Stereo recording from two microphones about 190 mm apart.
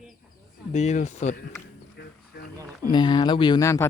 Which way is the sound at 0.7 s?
35° left (ahead or behind).